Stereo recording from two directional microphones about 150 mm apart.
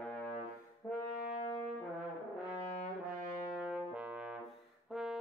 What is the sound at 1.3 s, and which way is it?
Brass instrument, 40° left (ahead or behind).